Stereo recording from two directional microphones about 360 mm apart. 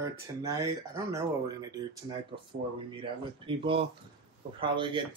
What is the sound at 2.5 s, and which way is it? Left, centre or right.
Speech, right.